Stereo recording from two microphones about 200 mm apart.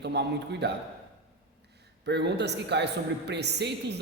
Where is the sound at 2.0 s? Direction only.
60° right (ahead or behind).